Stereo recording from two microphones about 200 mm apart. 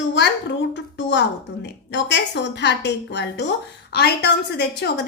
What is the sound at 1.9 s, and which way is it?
A woman's voice, 60° left (ahead or behind).